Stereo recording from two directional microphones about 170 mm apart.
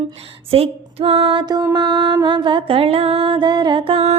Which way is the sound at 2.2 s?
25° right (ahead or behind).